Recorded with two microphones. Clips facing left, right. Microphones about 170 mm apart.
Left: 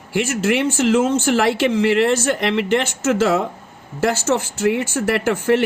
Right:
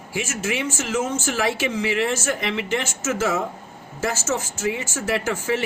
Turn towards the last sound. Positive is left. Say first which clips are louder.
# left 7 dB
turn(degrees=60)  # may be behind; listen again after turning